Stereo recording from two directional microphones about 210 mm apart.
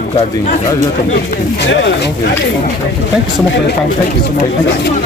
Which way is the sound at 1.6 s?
55° left (ahead or behind).